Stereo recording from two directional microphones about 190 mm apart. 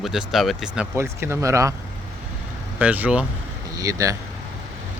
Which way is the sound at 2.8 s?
5° right (ahead or behind).